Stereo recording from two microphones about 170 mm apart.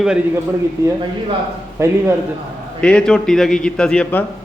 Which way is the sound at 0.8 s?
20° right (ahead or behind).